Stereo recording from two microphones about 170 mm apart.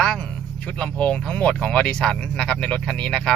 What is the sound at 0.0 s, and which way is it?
Speech, 5° left (ahead or behind).